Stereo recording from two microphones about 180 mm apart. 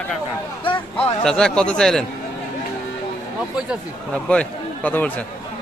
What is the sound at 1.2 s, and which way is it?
Speech, 5° left (ahead or behind).